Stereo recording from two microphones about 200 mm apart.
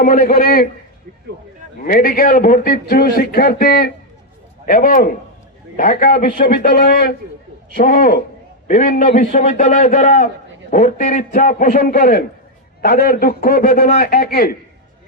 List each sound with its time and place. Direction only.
0.0 s a man's voice: 45° left (ahead or behind)
1.9 s a man's voice: 45° left (ahead or behind)